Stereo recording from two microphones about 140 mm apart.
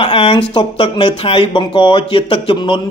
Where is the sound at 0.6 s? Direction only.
35° left (ahead or behind).